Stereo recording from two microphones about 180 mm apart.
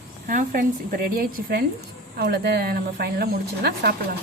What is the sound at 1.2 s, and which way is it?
Speech, 55° right (ahead or behind).